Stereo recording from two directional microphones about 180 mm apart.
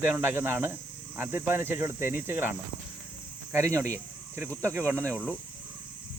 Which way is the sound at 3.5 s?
15° right (ahead or behind).